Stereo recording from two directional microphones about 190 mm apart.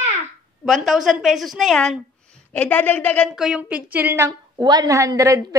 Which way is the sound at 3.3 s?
5° right (ahead or behind).